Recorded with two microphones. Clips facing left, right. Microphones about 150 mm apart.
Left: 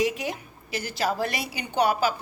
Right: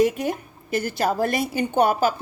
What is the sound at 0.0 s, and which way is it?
A woman's voice, 50° right (ahead or behind).